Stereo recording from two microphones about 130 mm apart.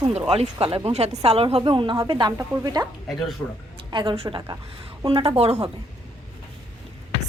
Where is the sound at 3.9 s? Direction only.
45° right (ahead or behind).